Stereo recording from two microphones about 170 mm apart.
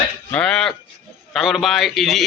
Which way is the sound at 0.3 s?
5° left (ahead or behind).